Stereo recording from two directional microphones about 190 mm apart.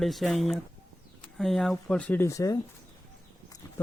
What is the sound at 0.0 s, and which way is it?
Speech, centre (ahead or behind).